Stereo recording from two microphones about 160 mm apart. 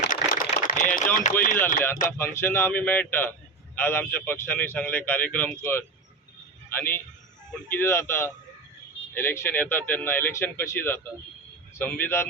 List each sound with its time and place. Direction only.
0.1 s a sound: 55° left (ahead or behind)
1.1 s speech: 60° left (ahead or behind)
2.0 s speech: 15° left (ahead or behind)